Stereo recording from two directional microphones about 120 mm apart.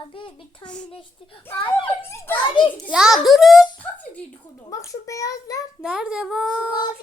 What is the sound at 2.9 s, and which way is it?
Speech, 5° right (ahead or behind).